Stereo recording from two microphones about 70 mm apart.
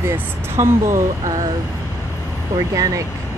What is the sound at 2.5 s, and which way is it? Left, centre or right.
Speech, right.